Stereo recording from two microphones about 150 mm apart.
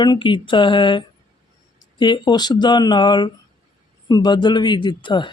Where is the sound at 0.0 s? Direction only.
30° left (ahead or behind).